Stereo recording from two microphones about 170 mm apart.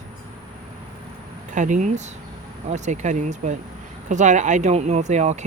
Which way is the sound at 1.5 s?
45° right (ahead or behind).